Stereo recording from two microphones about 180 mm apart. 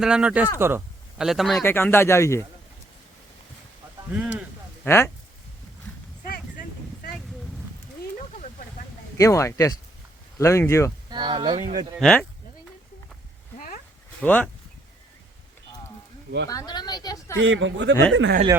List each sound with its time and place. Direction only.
0.0 s speech: 5° right (ahead or behind)
1.2 s speech: centre (ahead or behind)
1.6 s speech: 15° left (ahead or behind)
4.1 s speech: 10° right (ahead or behind)
4.8 s speech: 15° left (ahead or behind)
6.2 s a sound: 55° left (ahead or behind)
9.1 s speech: 15° left (ahead or behind)
11.1 s speech: 25° right (ahead or behind)
11.9 s speech: 5° left (ahead or behind)
14.2 s speech: 5° left (ahead or behind)
16.5 s speech: 20° left (ahead or behind)
17.3 s speech: 90° right